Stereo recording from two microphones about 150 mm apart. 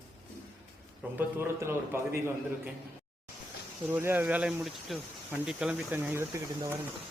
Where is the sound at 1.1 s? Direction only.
15° right (ahead or behind).